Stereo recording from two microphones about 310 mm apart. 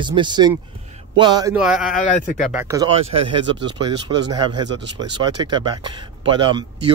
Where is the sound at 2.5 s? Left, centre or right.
Centre.